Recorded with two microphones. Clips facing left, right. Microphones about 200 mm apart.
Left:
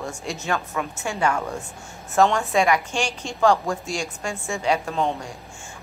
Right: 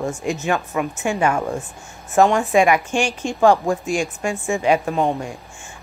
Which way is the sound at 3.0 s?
50° right (ahead or behind).